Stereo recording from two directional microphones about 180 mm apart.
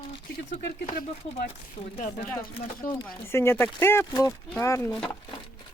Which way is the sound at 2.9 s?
15° left (ahead or behind).